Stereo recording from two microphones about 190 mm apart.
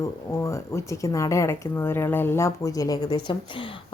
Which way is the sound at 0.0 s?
15° left (ahead or behind).